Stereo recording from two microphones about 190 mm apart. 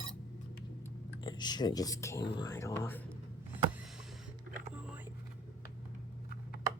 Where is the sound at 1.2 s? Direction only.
20° left (ahead or behind).